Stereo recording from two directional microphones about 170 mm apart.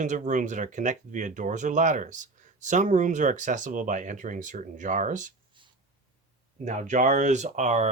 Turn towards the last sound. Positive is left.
turn(degrees=-45)  # may be behind; listen again after turning